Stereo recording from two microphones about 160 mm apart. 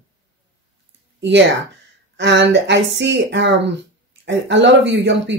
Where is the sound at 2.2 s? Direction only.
90° right.